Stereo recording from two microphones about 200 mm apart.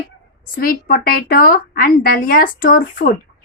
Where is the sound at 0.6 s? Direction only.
45° left (ahead or behind).